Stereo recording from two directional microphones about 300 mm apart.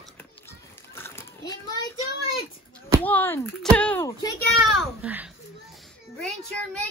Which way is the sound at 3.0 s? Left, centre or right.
Centre.